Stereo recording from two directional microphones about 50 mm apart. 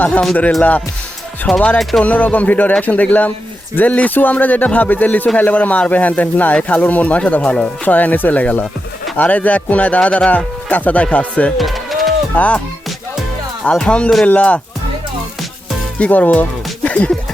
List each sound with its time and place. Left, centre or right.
1.5 s speech: centre
2.0 s speech: left
7.4 s speech: centre
7.9 s speech: left
11.5 s music: centre
12.3 s speech: left
13.7 s speech: left
16.0 s speech: left